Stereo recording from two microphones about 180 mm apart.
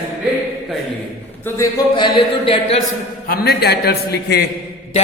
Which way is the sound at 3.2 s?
55° left (ahead or behind).